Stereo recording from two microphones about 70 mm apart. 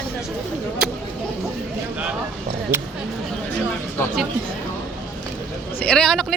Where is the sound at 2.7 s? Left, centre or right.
Right.